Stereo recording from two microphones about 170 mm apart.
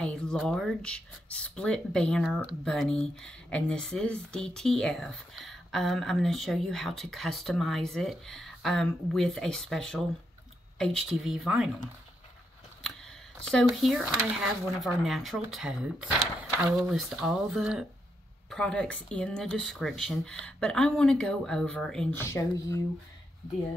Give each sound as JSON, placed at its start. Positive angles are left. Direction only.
{"t": 0.0, "sound": "speech", "side_deg": 5}
{"t": 12.8, "sound": "speech", "side_deg": 5}
{"t": 22.2, "sound": "speech", "side_deg": 15}